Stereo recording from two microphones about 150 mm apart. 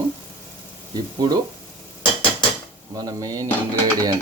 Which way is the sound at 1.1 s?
25° right (ahead or behind).